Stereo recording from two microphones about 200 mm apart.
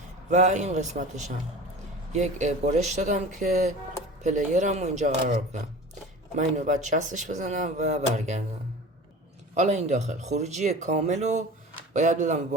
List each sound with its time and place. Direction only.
0.3 s speech: 35° right (ahead or behind)
6.3 s speech: 35° right (ahead or behind)
9.6 s speech: 35° right (ahead or behind)